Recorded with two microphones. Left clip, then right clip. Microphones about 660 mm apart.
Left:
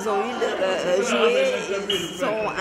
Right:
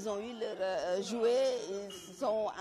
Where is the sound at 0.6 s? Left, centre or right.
Right.